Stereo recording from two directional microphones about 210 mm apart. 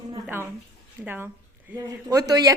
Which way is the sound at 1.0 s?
10° right (ahead or behind).